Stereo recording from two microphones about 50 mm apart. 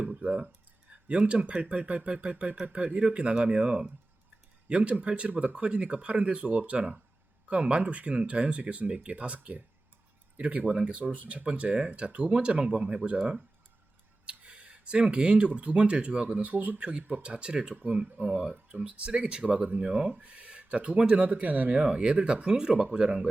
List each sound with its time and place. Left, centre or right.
0.0 s a sound: right
1.0 s speech: right
21.2 s speech: right